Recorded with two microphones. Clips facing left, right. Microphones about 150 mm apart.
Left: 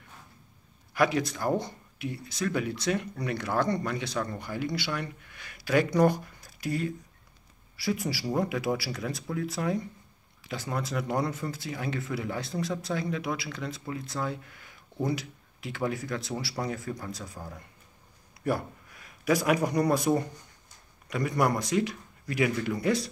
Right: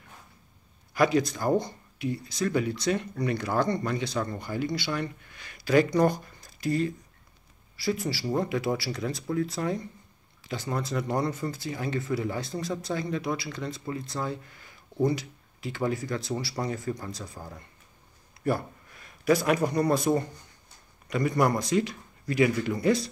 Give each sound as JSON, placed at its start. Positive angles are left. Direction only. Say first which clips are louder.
{"t": 0.9, "sound": "speech", "louder": "right 2 dB", "side_deg": 5}
{"t": 18.4, "sound": "speech", "louder": "right 1 dB", "side_deg": 5}